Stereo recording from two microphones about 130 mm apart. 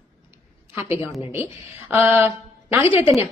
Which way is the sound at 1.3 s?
15° right (ahead or behind).